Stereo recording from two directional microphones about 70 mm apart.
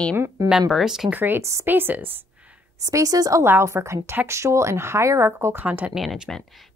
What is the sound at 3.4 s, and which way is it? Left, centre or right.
Speech, right.